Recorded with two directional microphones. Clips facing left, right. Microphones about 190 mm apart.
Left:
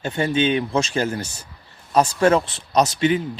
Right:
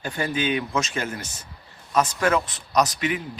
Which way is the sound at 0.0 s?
25° left (ahead or behind).